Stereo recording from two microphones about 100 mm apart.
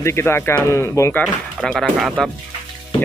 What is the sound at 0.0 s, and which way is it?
Speech, 25° left (ahead or behind).